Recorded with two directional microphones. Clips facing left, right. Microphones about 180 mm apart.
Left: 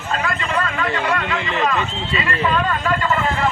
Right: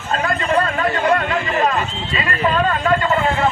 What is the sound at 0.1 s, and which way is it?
A man's voice, 45° right (ahead or behind).